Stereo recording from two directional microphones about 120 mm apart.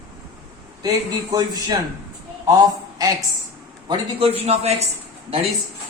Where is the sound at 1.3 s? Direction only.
30° right (ahead or behind).